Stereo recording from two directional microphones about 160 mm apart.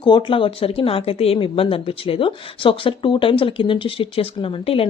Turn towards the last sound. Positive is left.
turn(degrees=35)  # may be behind; listen again after turning